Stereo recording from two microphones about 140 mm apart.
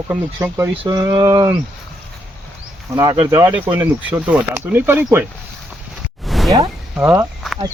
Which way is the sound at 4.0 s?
10° right (ahead or behind).